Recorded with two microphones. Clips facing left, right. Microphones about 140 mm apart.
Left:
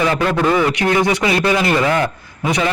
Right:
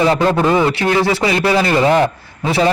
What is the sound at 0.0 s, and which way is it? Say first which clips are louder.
A man's voice: right 3 dB; 30° right (ahead or behind).